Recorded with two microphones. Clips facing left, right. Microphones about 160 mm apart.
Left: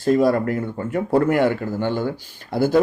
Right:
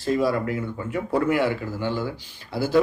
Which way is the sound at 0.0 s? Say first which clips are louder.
Left 5 dB; 50° left (ahead or behind).